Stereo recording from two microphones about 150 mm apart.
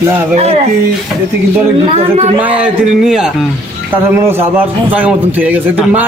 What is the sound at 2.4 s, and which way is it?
Speech, 10° right (ahead or behind).